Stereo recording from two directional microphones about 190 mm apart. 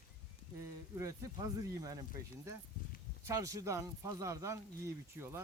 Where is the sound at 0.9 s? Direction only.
15° right (ahead or behind).